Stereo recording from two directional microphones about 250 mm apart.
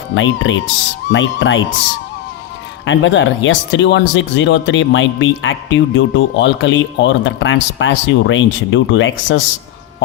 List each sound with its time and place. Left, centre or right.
0.1 s speech: left
2.8 s speech: left